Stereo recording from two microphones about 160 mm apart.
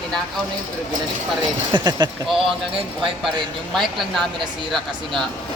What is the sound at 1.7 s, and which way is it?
Speech, 25° right (ahead or behind).